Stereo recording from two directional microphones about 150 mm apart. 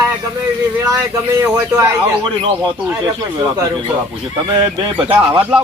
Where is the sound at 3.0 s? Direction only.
25° right (ahead or behind).